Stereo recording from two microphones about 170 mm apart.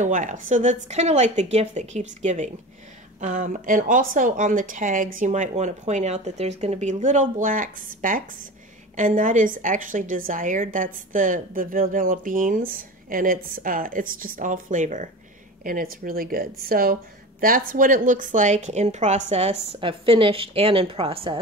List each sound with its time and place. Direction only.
0.0 s a woman's voice: 50° right (ahead or behind); by 21.4 s 35° right (ahead or behind)